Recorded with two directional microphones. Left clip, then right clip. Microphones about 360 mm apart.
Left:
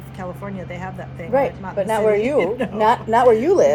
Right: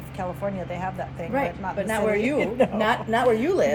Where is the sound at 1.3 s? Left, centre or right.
Centre.